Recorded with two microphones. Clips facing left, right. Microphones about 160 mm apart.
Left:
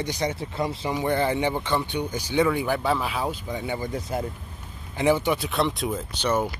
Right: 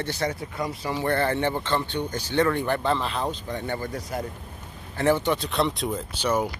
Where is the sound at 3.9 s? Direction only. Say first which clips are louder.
Left 2 dB; 25° left (ahead or behind).